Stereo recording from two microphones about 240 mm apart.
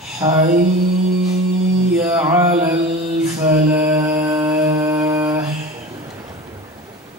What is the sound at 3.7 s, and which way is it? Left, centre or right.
Mantra, centre.